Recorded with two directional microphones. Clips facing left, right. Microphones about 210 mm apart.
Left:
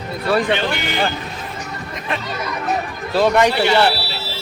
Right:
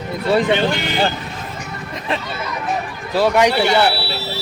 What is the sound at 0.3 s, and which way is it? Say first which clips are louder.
Speech: right 2 dB; 20° right (ahead or behind).